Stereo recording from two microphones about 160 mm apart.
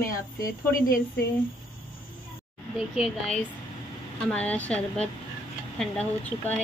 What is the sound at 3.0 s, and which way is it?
Speech, 5° left (ahead or behind).